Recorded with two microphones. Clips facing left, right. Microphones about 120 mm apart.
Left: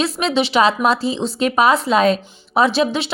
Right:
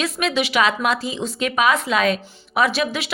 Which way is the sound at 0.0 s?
30° left (ahead or behind).